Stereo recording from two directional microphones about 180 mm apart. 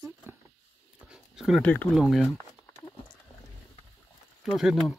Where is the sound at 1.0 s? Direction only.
5° right (ahead or behind).